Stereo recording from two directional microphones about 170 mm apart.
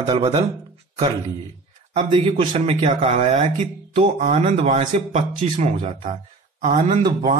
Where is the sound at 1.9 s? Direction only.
35° right (ahead or behind).